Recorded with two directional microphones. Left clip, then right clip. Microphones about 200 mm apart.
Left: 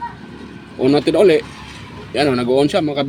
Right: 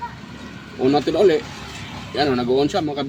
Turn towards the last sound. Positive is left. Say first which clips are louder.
# left 4 dB
turn(degrees=35)  # may be behind; listen again after turning